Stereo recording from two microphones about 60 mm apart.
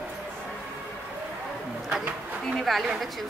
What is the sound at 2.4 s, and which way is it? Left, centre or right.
Speech, centre.